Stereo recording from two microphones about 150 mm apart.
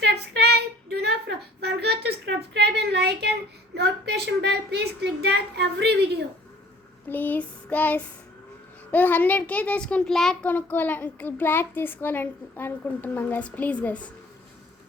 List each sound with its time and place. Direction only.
0.0 s a sound: 90° right
7.1 s child singing: 10° left (ahead or behind)
8.9 s a child's voice: 10° left (ahead or behind)